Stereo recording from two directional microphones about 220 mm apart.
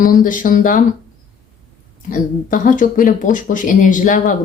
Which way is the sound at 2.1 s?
40° left (ahead or behind).